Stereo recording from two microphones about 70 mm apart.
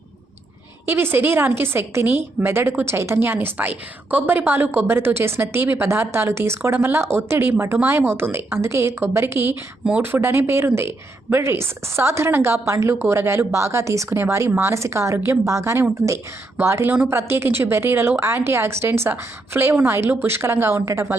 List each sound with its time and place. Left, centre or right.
0.9 s a woman's voice: right